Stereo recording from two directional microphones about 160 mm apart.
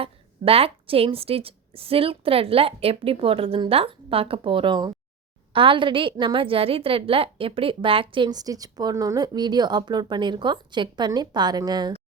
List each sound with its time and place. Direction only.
0.0 s a woman's voice: 35° right (ahead or behind)